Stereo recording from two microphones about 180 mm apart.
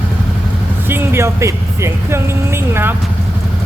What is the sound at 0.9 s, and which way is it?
Speech, 15° right (ahead or behind).